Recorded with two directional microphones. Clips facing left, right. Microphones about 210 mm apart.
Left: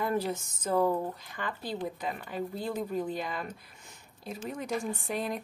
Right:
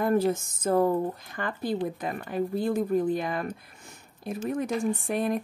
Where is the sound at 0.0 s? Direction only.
50° right (ahead or behind).